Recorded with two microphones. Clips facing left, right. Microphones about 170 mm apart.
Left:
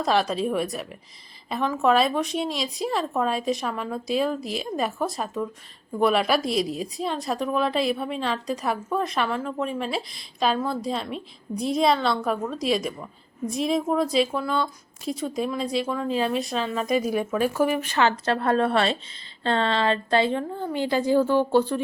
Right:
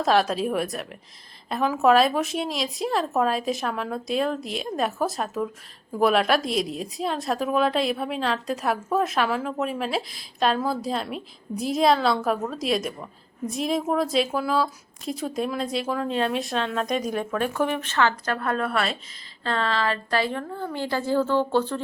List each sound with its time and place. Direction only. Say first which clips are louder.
0.0 s a woman's voice: right 1 dB; centre (ahead or behind)